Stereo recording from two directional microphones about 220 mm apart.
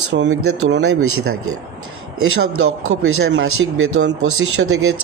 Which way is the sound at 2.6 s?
65° right (ahead or behind).